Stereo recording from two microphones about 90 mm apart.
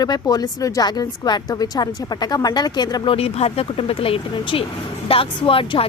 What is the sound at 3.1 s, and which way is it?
Speech, 90° left.